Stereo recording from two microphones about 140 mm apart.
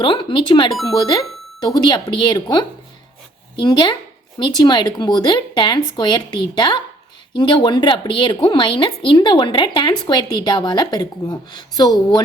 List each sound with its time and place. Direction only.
0.0 s a woman's voice: 35° left (ahead or behind)